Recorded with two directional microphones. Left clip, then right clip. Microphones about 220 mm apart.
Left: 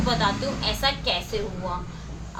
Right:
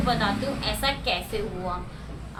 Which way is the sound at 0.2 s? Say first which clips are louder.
Left 2 dB; 5° left (ahead or behind).